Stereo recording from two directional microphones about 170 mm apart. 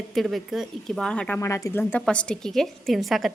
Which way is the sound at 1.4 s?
15° left (ahead or behind).